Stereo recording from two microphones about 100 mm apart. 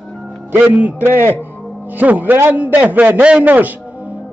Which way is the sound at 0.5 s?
15° right (ahead or behind).